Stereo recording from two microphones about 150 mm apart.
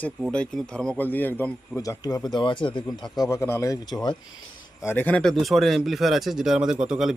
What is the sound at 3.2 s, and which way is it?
Speech, 20° left (ahead or behind).